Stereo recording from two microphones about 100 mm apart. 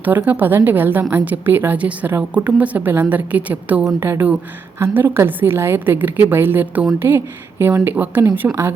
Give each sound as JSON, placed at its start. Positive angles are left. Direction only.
{"t": 0.0, "sound": "a woman's voice", "side_deg": -20}